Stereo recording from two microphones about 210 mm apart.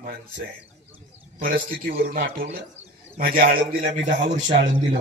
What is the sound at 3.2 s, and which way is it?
A man's voice, 45° right (ahead or behind).